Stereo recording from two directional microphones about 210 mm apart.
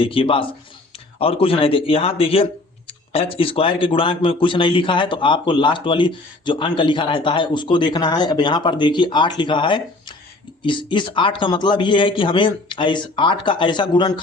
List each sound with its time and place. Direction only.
0.0 s a man's voice: 25° left (ahead or behind)